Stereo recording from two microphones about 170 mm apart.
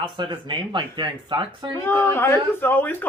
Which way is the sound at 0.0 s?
30° right (ahead or behind).